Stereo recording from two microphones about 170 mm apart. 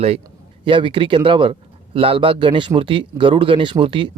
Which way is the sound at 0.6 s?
30° right (ahead or behind).